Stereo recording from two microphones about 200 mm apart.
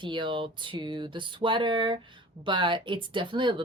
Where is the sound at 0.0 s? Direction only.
25° right (ahead or behind).